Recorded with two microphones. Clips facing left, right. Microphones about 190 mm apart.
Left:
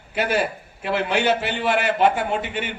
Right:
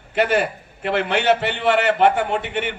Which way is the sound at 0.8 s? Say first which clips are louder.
Right 2 dB; 65° right (ahead or behind).